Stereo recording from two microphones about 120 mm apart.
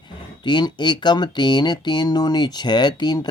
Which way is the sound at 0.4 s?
40° left (ahead or behind).